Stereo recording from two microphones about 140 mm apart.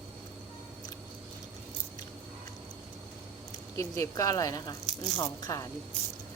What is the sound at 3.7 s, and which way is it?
Speech, 20° left (ahead or behind).